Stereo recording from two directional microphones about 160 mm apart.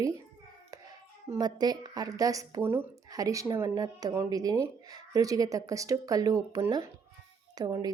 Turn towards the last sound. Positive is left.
turn(degrees=-25)  # may be behind; listen again after turning